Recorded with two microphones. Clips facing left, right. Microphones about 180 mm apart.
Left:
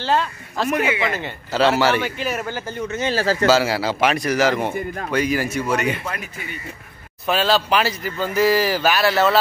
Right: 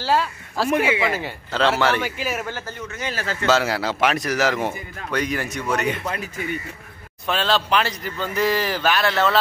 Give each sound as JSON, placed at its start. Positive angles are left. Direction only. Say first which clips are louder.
{"t": 0.0, "sound": "speech", "louder": "even", "side_deg": -5}
{"t": 1.5, "sound": "speech", "louder": "left 3 dB", "side_deg": 5}
{"t": 2.6, "sound": "speech", "louder": "left 6 dB", "side_deg": 25}
{"t": 3.4, "sound": "speech", "louder": "left 1 dB", "side_deg": 0}
{"t": 7.2, "sound": "speech", "louder": "left 3 dB", "side_deg": 10}